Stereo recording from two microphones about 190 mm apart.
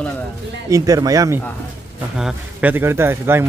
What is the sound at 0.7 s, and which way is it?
Speech, 20° right (ahead or behind).